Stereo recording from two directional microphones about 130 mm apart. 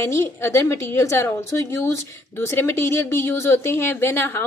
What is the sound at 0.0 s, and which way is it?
Speech, 20° left (ahead or behind).